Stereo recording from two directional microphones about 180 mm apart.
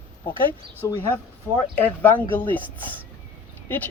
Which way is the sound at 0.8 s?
20° left (ahead or behind).